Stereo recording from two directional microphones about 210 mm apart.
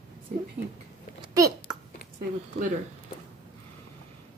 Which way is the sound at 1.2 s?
20° right (ahead or behind).